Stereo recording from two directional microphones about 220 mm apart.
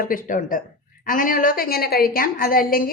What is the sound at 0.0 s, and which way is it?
A woman's voice, 40° left (ahead or behind).